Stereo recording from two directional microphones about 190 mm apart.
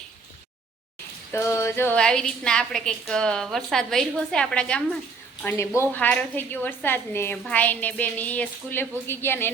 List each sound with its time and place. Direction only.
1.3 s a woman's voice: 15° left (ahead or behind)